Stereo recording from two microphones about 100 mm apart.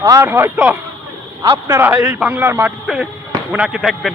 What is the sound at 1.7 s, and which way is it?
Speech, 20° right (ahead or behind).